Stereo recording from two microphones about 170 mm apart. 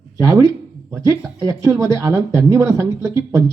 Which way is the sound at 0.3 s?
20° right (ahead or behind).